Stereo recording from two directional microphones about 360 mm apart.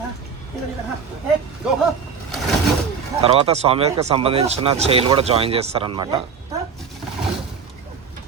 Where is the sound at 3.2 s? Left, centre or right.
Centre.